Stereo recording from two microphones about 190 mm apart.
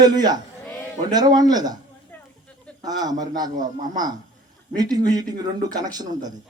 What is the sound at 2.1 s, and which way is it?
Snake, 10° left (ahead or behind).